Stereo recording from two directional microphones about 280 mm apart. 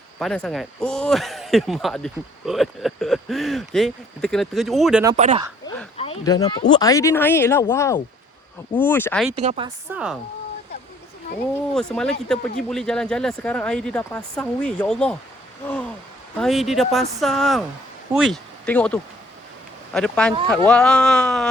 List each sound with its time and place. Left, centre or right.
0.2 s speech: centre
5.1 s speech: right
6.0 s speech: centre
9.4 s speech: right
9.9 s speech: centre
11.7 s speech: centre